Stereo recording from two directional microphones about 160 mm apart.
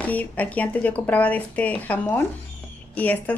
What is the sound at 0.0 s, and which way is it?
Speech, 10° left (ahead or behind).